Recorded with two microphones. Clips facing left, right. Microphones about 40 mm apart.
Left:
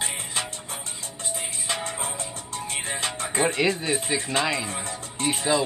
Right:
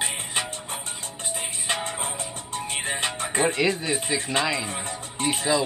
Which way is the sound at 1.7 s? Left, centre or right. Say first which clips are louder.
Right 2 dB; centre.